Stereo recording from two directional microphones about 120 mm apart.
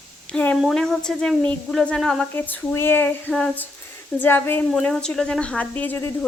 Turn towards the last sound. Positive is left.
turn(degrees=20)  # may be behind; listen again after turning